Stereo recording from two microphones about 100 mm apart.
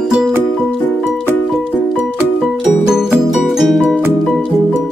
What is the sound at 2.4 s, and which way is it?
Music, 5° right (ahead or behind).